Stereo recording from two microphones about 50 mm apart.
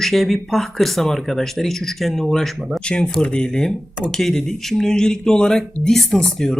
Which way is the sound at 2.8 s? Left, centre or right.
Centre.